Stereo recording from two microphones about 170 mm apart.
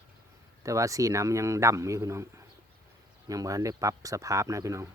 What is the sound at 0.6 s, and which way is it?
A man's voice, 20° right (ahead or behind).